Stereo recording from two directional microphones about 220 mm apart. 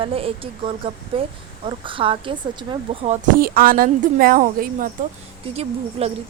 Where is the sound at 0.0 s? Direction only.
25° right (ahead or behind).